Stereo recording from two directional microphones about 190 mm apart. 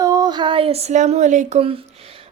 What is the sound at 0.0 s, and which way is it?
A woman's voice, 20° right (ahead or behind).